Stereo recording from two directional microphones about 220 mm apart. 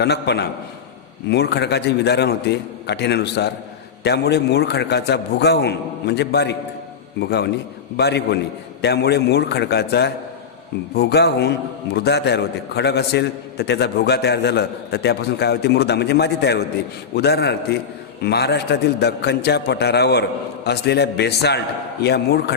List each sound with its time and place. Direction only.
0.0 s a man's voice: 50° left (ahead or behind)